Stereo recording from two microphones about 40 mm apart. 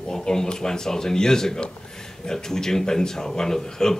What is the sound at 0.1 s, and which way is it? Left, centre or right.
Speech, centre.